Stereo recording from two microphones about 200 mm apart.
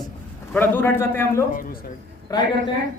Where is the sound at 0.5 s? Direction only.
10° left (ahead or behind).